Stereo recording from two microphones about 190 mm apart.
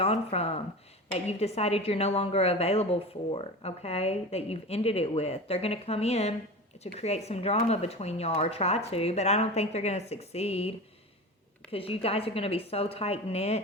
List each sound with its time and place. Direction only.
0.0 s a woman's voice: 30° left (ahead or behind)